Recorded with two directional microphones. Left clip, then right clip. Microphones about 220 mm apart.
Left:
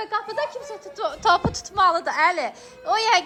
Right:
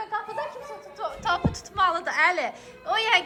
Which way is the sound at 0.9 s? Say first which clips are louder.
Left 7 dB; 30° left (ahead or behind).